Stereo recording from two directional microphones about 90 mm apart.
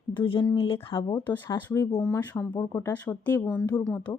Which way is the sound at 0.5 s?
85° left.